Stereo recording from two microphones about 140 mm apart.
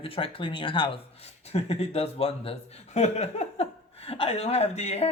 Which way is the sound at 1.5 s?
45° left (ahead or behind).